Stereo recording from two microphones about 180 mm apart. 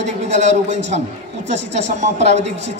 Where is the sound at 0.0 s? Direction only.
40° right (ahead or behind).